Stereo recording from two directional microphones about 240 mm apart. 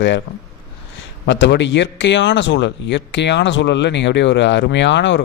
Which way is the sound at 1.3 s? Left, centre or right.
Left.